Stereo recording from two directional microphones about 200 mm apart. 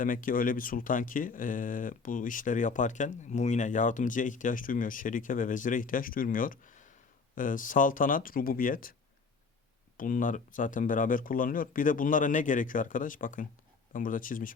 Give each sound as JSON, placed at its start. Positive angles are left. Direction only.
{"t": 0.0, "sound": "speech", "side_deg": 45}
{"t": 10.0, "sound": "speech", "side_deg": 45}